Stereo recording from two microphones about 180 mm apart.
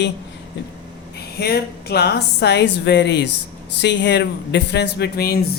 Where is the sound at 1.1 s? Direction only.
60° left (ahead or behind).